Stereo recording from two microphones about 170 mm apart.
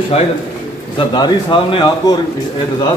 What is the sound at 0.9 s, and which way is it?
Speech, 25° left (ahead or behind).